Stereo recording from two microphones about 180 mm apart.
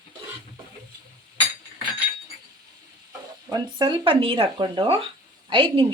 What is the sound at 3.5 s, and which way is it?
Speech, 25° right (ahead or behind).